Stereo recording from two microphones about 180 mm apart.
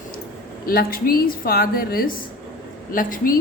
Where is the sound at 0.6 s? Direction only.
55° left (ahead or behind).